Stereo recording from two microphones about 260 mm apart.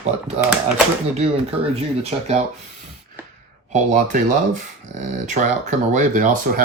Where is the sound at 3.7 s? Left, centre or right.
Right.